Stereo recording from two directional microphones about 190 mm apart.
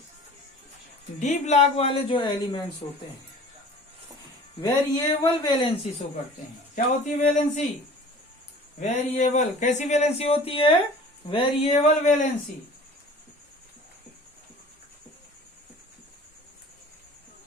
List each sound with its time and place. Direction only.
1.2 s speech: 40° left (ahead or behind)
4.6 s speech: 20° left (ahead or behind)
6.7 s speech: 40° left (ahead or behind)
8.8 s speech: 40° left (ahead or behind)